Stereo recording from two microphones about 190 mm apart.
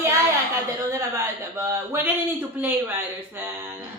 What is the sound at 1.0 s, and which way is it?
Speech, 15° right (ahead or behind).